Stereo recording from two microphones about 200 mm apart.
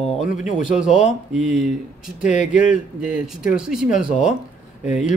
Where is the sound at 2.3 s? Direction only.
40° left (ahead or behind).